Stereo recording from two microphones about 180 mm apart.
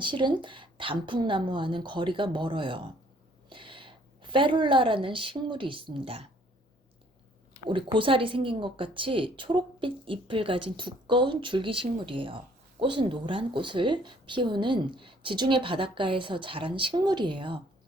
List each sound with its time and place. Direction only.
0.0 s a woman's voice: 25° right (ahead or behind)
7.7 s speech: 25° right (ahead or behind)